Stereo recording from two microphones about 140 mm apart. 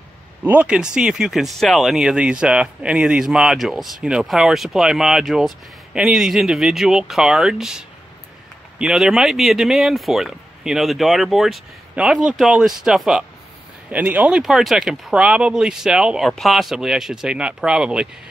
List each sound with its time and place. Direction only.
0.4 s speech: 10° right (ahead or behind)